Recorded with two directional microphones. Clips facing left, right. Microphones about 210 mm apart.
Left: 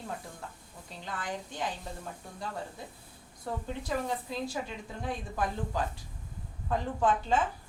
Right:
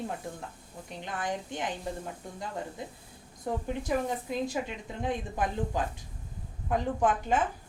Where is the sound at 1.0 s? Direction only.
20° right (ahead or behind).